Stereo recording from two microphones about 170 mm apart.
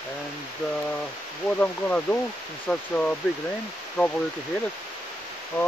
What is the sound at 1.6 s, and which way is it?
Speech, 10° left (ahead or behind).